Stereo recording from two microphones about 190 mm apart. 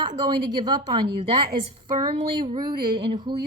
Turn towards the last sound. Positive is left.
turn(degrees=-35)  # may be behind; listen again after turning